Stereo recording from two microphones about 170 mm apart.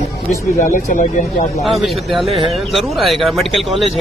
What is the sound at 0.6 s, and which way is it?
Speech, 50° left (ahead or behind).